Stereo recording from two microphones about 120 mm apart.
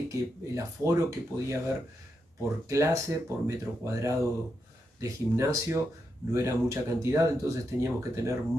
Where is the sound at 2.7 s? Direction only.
25° right (ahead or behind).